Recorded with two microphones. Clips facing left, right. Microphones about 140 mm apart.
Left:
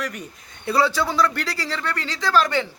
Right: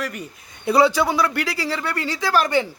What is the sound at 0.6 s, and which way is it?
Speech, 15° right (ahead or behind).